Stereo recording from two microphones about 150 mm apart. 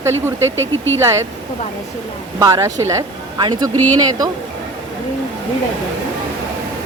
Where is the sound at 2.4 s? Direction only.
20° right (ahead or behind).